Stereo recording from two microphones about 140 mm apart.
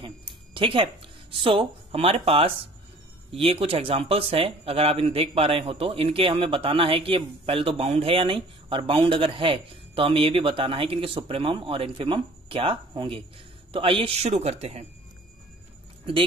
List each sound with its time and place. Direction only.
0.6 s speech: 40° right (ahead or behind)